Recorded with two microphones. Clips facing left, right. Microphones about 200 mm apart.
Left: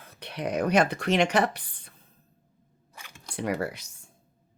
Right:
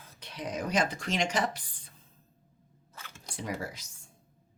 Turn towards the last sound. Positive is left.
turn(degrees=65)  # may be behind; listen again after turning